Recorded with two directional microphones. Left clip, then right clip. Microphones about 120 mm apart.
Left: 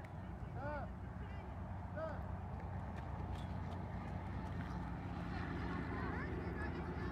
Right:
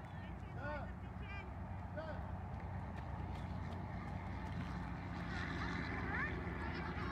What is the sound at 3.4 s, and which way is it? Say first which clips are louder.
Vehicle: even; centre (ahead or behind).